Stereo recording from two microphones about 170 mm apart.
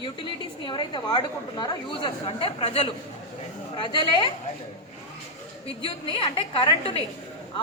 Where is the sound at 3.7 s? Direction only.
25° left (ahead or behind).